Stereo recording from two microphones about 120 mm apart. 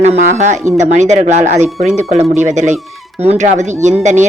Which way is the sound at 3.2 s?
75° right (ahead or behind).